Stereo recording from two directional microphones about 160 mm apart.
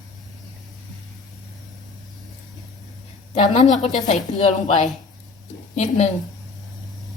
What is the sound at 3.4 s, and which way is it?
Speech, 50° left (ahead or behind).